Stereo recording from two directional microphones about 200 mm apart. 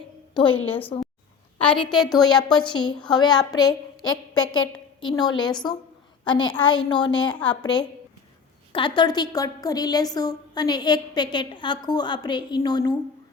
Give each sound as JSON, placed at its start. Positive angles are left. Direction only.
{"t": 0.5, "sound": "a woman's voice", "side_deg": 10}
{"t": 1.5, "sound": "a woman's voice", "side_deg": 25}
{"t": 4.1, "sound": "a woman's voice", "side_deg": 90}
{"t": 4.9, "sound": "a woman's voice", "side_deg": 20}